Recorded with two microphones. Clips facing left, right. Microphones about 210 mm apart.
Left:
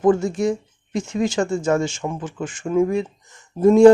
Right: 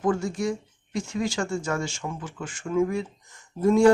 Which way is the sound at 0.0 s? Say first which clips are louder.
Left 7 dB; 20° left (ahead or behind).